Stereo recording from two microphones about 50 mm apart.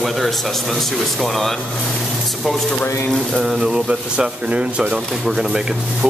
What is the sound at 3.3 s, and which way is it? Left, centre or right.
Speech, centre.